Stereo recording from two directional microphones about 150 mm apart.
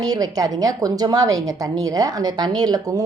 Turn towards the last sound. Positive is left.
turn(degrees=-25)  # may be behind; listen again after turning